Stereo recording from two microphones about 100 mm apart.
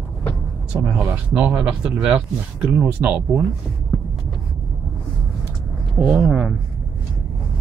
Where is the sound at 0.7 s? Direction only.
10° right (ahead or behind).